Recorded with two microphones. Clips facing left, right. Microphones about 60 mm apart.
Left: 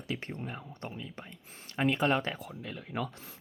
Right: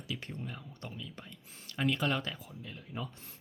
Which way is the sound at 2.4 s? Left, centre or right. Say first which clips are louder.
Left 6 dB; left.